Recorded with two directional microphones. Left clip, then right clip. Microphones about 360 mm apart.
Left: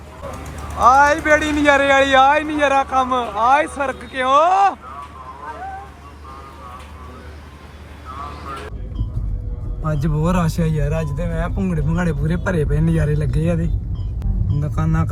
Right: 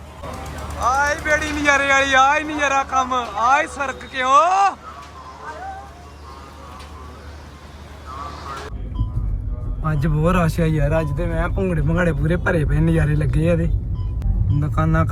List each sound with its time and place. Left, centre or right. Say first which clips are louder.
0.3 s a man's voice: right 1 dB; centre
9.8 s a man's voice: right 1 dB; centre
11.2 s speech: right 1 dB; right
11.5 s a man's voice: right 3 dB; centre